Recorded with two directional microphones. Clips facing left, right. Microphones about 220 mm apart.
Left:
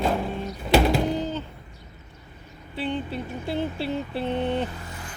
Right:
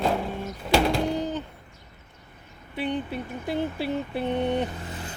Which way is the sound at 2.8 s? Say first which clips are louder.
Even; 15° right (ahead or behind).